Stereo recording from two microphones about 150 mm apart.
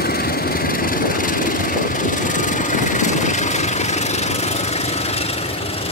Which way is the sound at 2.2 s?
60° left (ahead or behind).